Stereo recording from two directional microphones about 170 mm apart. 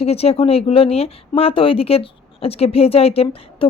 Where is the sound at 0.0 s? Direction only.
35° left (ahead or behind).